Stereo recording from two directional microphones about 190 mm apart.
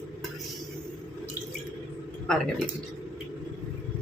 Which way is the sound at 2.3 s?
5° left (ahead or behind).